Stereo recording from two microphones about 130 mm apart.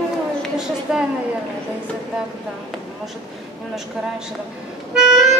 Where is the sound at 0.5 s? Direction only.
5° right (ahead or behind).